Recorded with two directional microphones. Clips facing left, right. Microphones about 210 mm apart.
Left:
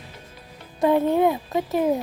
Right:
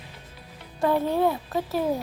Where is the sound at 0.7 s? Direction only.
20° left (ahead or behind).